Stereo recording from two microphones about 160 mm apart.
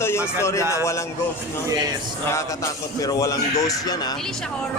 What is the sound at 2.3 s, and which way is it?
A man's voice, 20° left (ahead or behind).